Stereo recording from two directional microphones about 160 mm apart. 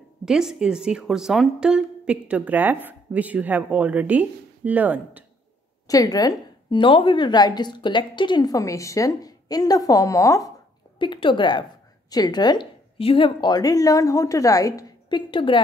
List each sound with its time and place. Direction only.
0.2 s speech: 5° right (ahead or behind)
5.9 s a woman's voice: 20° left (ahead or behind)
11.0 s a woman's voice: 30° left (ahead or behind)